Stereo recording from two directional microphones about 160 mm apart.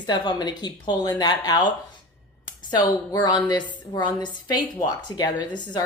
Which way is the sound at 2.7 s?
25° left (ahead or behind).